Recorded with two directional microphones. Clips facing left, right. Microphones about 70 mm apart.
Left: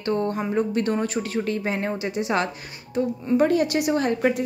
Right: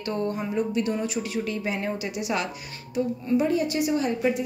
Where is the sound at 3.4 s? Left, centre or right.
Left.